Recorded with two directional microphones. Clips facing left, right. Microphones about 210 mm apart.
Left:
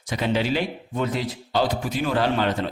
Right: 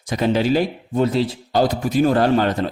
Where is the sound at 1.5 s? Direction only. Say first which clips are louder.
Right 6 dB; 40° right (ahead or behind).